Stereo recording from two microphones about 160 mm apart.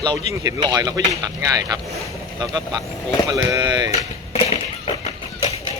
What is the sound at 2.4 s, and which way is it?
Speech, 25° right (ahead or behind).